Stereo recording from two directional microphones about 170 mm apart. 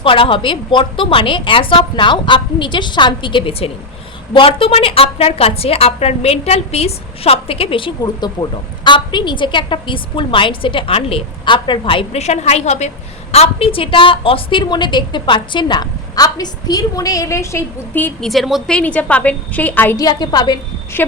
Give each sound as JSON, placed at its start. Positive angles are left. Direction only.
{"t": 0.0, "sound": "a woman's voice", "side_deg": 30}
{"t": 18.3, "sound": "a woman's voice", "side_deg": 0}